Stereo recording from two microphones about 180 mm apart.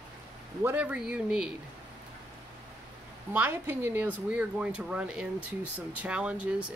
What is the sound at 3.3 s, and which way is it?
Speech, 10° right (ahead or behind).